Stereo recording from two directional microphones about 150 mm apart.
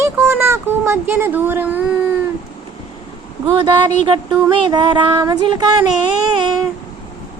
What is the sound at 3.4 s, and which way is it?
Child singing, 25° right (ahead or behind).